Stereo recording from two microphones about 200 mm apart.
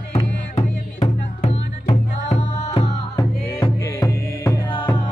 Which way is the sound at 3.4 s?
15° left (ahead or behind).